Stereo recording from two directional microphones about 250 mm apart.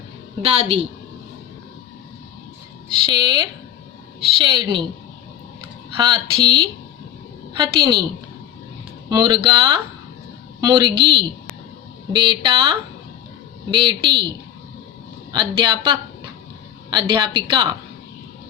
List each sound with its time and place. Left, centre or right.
0.4 s a man's voice: right
3.1 s a woman's voice: centre
6.0 s a woman's voice: centre
9.0 s a woman's voice: centre
15.3 s a woman's voice: centre